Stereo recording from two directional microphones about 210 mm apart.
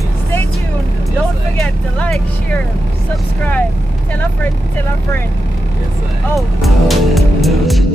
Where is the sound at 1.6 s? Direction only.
5° left (ahead or behind).